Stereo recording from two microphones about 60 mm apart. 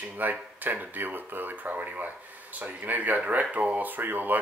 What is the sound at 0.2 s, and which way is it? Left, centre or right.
Speech, right.